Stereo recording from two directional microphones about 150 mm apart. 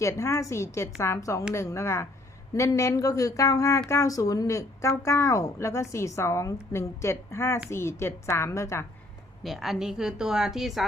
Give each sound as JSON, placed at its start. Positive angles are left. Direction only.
{"t": 0.0, "sound": "a woman's voice", "side_deg": 20}
{"t": 9.4, "sound": "a woman's voice", "side_deg": 0}